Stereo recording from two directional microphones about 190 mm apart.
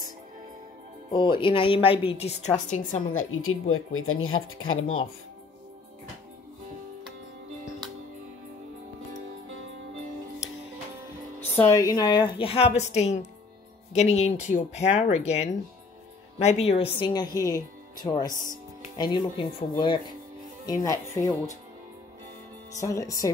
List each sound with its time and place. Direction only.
1.1 s a woman's voice: 25° left (ahead or behind); by 3.2 s 45° left (ahead or behind)
3.2 s speech: 90° left
11.5 s a woman's voice: 15° left (ahead or behind)
20.8 s speech: 15° left (ahead or behind)
22.7 s speech: 15° left (ahead or behind)